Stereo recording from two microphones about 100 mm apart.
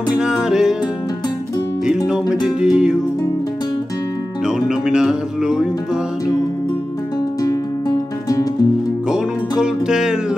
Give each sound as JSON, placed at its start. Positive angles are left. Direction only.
{"t": 0.1, "sound": "music", "side_deg": -5}
{"t": 2.4, "sound": "music", "side_deg": -5}
{"t": 4.5, "sound": "music", "side_deg": -5}
{"t": 7.4, "sound": "music", "side_deg": 40}
{"t": 9.1, "sound": "music", "side_deg": -5}